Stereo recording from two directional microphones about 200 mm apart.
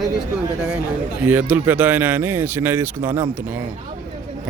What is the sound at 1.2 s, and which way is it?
Speech, 10° right (ahead or behind).